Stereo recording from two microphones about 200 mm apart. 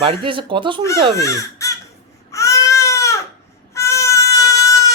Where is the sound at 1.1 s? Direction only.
15° left (ahead or behind).